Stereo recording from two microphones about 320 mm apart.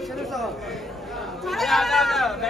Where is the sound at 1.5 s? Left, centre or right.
Centre.